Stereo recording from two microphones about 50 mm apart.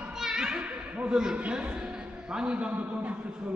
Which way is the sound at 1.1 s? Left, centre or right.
Centre.